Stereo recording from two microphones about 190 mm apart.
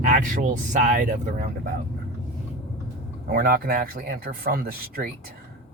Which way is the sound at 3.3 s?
50° right (ahead or behind).